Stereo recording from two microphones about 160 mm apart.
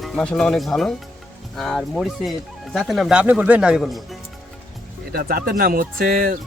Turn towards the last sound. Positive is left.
turn(degrees=-60)  # may be behind; listen again after turning